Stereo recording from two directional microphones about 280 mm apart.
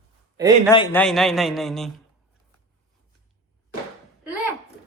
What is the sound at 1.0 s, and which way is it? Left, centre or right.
Speech, centre.